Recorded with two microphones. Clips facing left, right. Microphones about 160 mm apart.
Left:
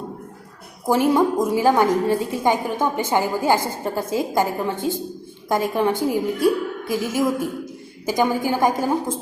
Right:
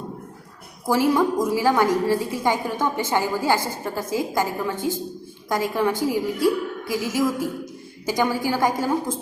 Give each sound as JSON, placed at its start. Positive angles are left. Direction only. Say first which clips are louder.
{"t": 0.9, "sound": "a woman's voice", "louder": "left 2 dB", "side_deg": 20}